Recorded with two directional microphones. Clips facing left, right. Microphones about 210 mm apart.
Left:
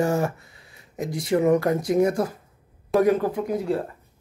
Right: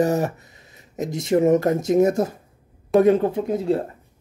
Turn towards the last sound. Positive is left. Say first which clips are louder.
# right 3 dB
turn(degrees=-25)  # may be behind; listen again after turning